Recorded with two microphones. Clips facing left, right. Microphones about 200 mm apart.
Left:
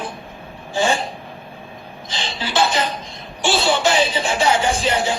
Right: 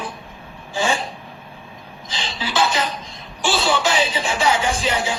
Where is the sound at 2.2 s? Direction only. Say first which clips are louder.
Left 1 dB; 45° left (ahead or behind).